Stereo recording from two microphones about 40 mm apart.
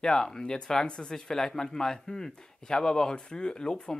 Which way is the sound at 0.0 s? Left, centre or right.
Centre.